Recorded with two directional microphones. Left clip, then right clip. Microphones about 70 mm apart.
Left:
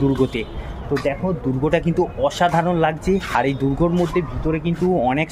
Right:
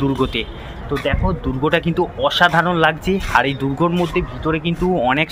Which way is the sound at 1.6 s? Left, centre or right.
Left.